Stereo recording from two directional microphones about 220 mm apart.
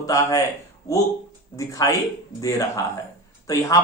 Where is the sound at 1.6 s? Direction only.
15° left (ahead or behind).